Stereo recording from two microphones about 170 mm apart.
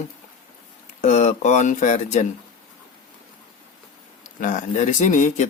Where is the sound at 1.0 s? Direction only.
40° left (ahead or behind).